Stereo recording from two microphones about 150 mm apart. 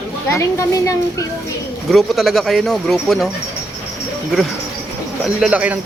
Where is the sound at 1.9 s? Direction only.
Centre (ahead or behind).